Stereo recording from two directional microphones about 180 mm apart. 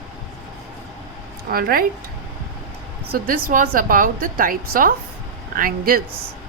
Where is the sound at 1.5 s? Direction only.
55° right (ahead or behind).